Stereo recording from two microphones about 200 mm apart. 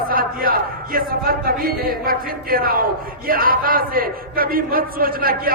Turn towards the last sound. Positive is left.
turn(degrees=-45)  # may be behind; listen again after turning